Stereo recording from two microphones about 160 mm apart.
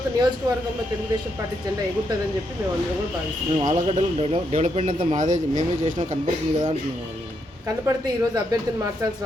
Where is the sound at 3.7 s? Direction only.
40° right (ahead or behind).